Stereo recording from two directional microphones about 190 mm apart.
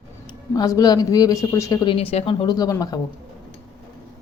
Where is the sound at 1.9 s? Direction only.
30° left (ahead or behind).